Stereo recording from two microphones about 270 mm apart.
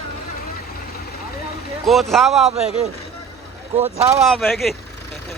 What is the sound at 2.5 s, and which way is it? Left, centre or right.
Speech, right.